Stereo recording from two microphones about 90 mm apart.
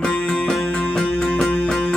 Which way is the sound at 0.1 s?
20° left (ahead or behind).